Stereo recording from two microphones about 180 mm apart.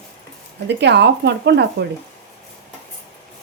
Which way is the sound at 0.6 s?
75° right (ahead or behind).